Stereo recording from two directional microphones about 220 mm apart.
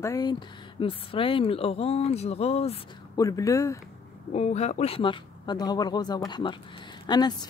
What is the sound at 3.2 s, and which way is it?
Speech, 15° left (ahead or behind).